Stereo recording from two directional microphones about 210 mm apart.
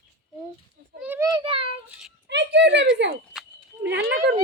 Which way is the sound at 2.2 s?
55° right (ahead or behind).